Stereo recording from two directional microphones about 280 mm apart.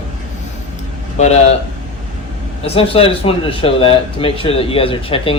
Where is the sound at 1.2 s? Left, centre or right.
Left.